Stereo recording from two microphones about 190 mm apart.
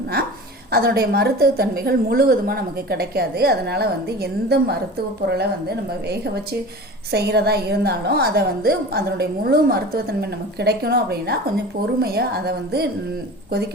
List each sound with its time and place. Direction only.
0.7 s a woman's voice: 55° right (ahead or behind)